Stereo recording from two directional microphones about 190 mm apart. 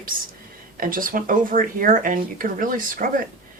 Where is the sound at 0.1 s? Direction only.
45° right (ahead or behind).